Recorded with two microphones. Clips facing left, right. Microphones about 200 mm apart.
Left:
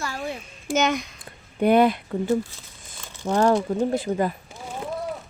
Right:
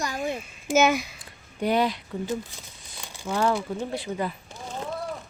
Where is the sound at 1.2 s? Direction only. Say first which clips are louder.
Left 6 dB; 55° left (ahead or behind).